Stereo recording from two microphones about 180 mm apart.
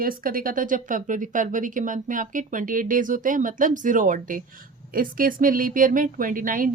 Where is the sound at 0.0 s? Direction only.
50° right (ahead or behind).